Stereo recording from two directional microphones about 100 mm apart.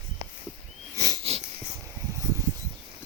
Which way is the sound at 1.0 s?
35° right (ahead or behind).